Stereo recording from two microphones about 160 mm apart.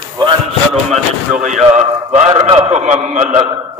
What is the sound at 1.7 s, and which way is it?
Speech, 40° right (ahead or behind).